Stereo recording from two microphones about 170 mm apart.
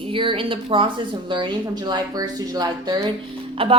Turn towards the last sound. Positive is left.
turn(degrees=-30)  # may be behind; listen again after turning